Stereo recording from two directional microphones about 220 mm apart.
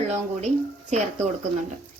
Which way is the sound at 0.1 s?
30° right (ahead or behind).